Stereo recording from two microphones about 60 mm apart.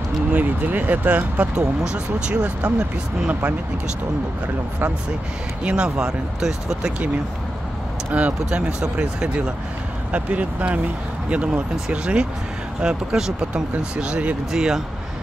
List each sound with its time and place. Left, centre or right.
0.3 s speech: right
5.6 s speech: centre
8.1 s speech: right